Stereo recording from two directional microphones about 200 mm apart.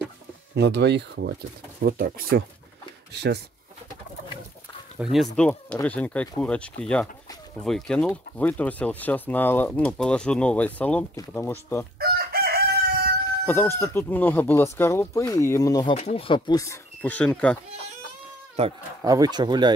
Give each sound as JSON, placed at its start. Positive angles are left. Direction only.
{"t": 0.6, "sound": "speech", "side_deg": -60}
{"t": 4.9, "sound": "speech", "side_deg": 0}
{"t": 12.0, "sound": "chicken", "side_deg": -50}
{"t": 13.5, "sound": "speech", "side_deg": 10}
{"t": 18.6, "sound": "speech", "side_deg": -30}
{"t": 19.0, "sound": "speech", "side_deg": -20}